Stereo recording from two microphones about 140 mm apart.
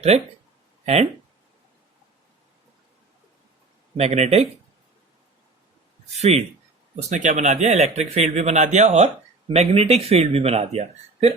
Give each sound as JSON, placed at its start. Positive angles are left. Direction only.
{"t": 0.1, "sound": "speech", "side_deg": -50}
{"t": 3.9, "sound": "speech", "side_deg": -50}
{"t": 6.1, "sound": "speech", "side_deg": -50}